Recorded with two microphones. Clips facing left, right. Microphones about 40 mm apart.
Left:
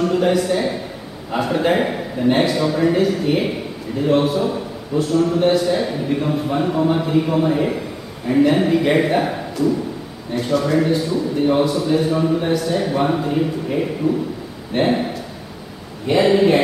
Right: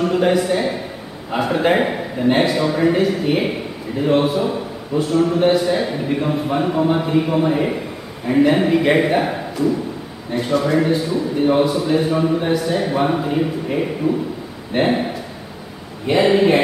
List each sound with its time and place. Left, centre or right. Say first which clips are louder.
0.0 s a man's voice: right 1 dB; centre
16.1 s a man's voice: even; centre